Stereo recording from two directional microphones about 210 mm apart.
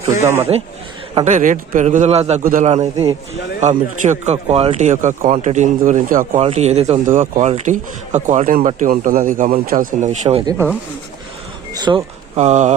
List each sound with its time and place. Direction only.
1.1 s speech: 35° right (ahead or behind)
10.4 s speech: 10° right (ahead or behind)
12.4 s speech: 35° right (ahead or behind)